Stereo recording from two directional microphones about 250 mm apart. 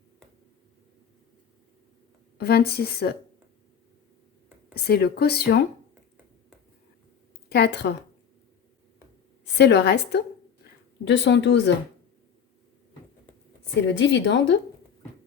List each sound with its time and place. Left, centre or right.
2.4 s speech: left
4.7 s speech: left
7.5 s speech: left
9.4 s speech: left
13.8 s speech: left